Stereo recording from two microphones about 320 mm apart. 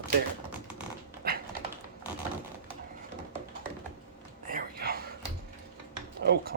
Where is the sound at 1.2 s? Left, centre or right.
Right.